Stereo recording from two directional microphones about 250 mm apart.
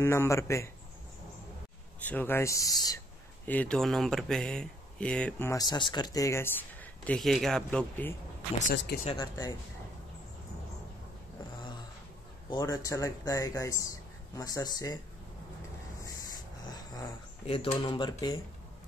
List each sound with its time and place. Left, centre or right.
0.0 s a man's voice: centre
2.0 s a man's voice: centre
8.7 s speech: left
9.0 s a man's voice: centre
12.4 s a man's voice: centre
16.7 s speech: centre